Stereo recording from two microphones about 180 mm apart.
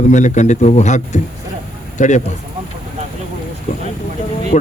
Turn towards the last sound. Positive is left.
turn(degrees=40)  # may be behind; listen again after turning